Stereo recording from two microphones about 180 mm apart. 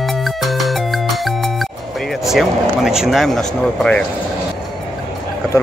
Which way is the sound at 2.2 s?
Centre (ahead or behind).